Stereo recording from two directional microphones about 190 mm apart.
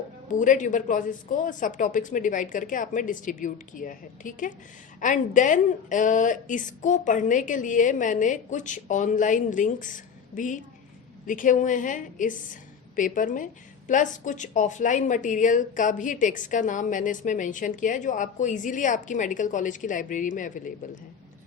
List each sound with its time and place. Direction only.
0.3 s a woman's voice: 40° left (ahead or behind)